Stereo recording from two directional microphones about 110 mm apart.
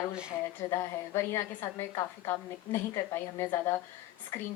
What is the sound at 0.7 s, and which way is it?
Speech, 25° left (ahead or behind).